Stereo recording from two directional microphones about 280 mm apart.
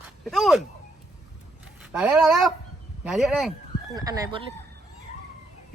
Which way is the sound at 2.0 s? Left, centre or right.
Centre.